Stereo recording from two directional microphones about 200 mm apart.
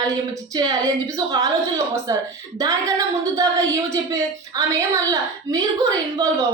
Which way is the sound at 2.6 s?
15° right (ahead or behind).